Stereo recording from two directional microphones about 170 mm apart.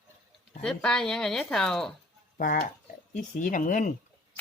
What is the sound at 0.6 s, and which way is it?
Speech, 5° left (ahead or behind).